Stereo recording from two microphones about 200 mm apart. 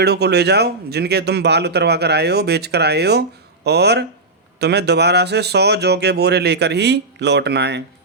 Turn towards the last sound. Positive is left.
turn(degrees=-55)  # may be behind; listen again after turning